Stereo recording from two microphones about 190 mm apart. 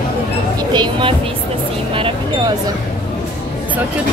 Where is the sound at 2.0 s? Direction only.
25° right (ahead or behind).